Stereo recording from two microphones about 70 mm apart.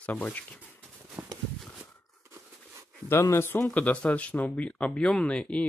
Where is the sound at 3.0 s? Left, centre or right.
Left.